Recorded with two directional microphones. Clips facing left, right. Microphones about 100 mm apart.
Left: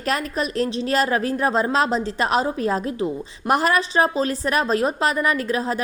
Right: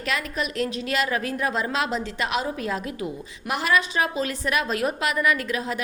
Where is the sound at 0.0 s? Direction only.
40° left (ahead or behind).